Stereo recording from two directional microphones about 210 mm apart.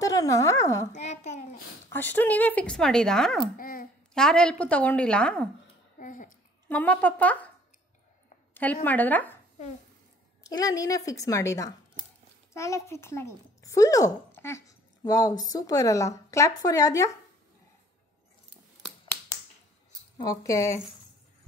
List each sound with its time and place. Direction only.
0.0 s speech: 15° left (ahead or behind)
0.9 s a sound: 35° left (ahead or behind)
1.9 s speech: 10° left (ahead or behind)
3.5 s dog: 40° left (ahead or behind)
4.1 s speech: 5° left (ahead or behind)
5.9 s a sound: 40° left (ahead or behind)
6.7 s speech: 5° left (ahead or behind)
8.8 s speech: 10° left (ahead or behind)
10.4 s speech: 15° left (ahead or behind)
20.2 s speech: 15° left (ahead or behind)